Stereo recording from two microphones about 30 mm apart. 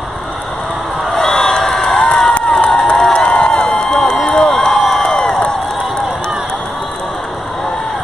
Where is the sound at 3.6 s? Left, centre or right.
Centre.